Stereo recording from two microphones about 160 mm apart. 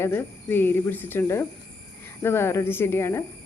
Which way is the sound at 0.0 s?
15° left (ahead or behind).